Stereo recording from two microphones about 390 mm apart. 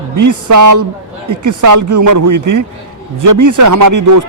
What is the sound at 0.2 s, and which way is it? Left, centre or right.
A man's voice, right.